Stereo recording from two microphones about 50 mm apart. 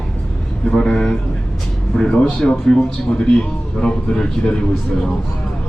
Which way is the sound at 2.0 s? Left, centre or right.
Centre.